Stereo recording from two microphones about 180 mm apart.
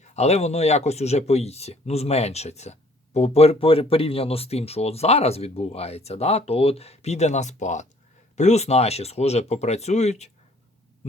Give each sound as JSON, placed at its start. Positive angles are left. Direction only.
{"t": 0.0, "sound": "speech", "side_deg": 35}